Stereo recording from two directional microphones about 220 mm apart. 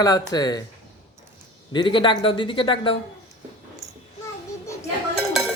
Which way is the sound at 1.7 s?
20° left (ahead or behind).